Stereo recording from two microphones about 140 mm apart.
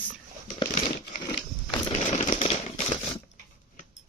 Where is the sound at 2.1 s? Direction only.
60° left (ahead or behind).